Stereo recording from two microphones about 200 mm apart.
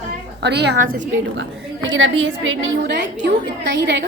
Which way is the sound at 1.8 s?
75° right (ahead or behind).